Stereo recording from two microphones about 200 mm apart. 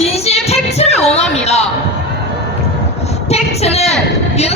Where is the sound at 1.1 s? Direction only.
30° left (ahead or behind).